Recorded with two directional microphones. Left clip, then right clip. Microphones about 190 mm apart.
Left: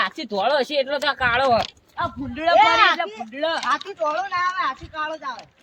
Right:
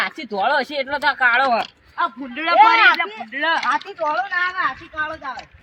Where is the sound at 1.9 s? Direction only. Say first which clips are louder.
Right 4 dB; 65° left (ahead or behind).